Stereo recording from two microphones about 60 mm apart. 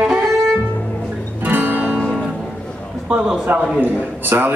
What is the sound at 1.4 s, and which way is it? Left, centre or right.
Music, right.